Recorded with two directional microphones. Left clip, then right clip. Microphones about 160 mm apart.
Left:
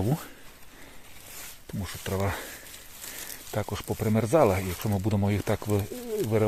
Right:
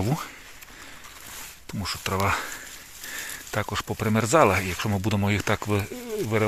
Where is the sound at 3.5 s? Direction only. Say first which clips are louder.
Right 3 dB; 5° left (ahead or behind).